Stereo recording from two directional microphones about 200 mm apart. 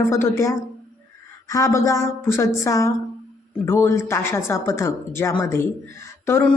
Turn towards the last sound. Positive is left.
turn(degrees=10)  # may be behind; listen again after turning